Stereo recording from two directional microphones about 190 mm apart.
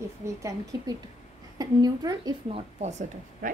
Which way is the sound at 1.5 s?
20° right (ahead or behind).